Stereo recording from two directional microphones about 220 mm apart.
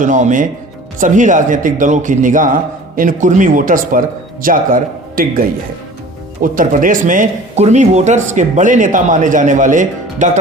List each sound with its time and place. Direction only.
0.0 s speech: 35° right (ahead or behind)